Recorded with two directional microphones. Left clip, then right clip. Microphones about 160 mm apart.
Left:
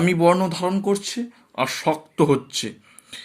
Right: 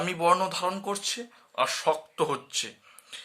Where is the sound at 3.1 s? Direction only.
25° left (ahead or behind).